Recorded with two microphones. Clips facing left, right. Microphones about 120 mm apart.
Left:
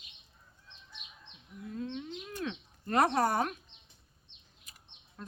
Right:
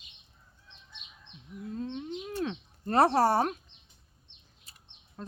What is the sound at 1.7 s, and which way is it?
Speech, 35° right (ahead or behind).